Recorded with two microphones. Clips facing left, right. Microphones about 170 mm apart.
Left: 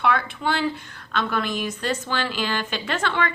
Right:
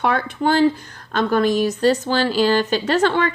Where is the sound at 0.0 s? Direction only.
40° right (ahead or behind).